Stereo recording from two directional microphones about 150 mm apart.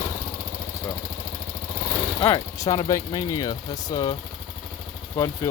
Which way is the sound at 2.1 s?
35° left (ahead or behind).